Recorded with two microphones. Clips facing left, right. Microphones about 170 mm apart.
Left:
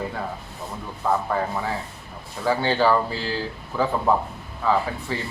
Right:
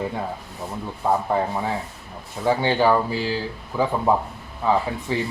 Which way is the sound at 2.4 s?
20° right (ahead or behind).